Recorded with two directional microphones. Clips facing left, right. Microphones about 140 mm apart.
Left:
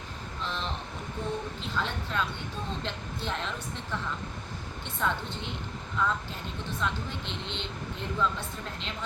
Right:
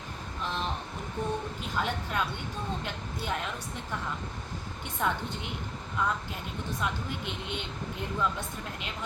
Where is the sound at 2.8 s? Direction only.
10° right (ahead or behind).